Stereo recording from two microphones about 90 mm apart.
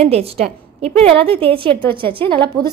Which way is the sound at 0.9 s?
90° right.